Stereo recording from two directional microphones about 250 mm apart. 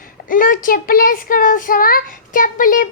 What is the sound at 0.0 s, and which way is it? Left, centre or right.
Speech, left.